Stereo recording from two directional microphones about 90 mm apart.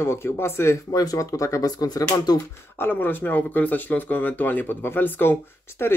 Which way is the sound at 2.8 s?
20° left (ahead or behind).